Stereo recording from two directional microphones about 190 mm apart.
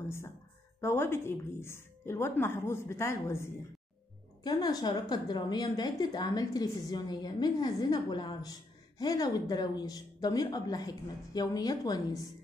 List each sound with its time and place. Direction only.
0.7 s a woman's voice: 15° left (ahead or behind)